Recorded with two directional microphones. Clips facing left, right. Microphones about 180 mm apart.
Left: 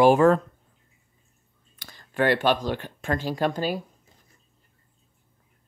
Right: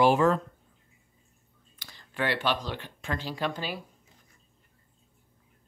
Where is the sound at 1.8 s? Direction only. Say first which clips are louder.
Left 7 dB; 50° left (ahead or behind).